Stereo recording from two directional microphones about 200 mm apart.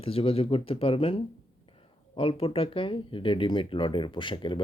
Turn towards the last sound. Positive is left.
turn(degrees=25)  # may be behind; listen again after turning